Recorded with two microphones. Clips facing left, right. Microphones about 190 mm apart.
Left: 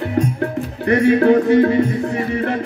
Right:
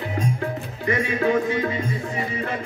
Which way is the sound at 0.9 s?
65° left (ahead or behind).